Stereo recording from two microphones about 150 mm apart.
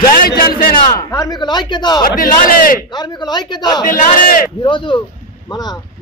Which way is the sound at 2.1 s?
65° left (ahead or behind).